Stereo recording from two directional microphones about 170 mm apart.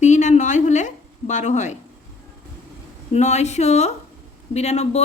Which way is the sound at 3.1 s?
40° left (ahead or behind).